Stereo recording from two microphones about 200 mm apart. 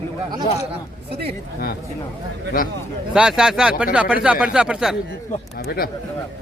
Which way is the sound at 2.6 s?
45° left (ahead or behind).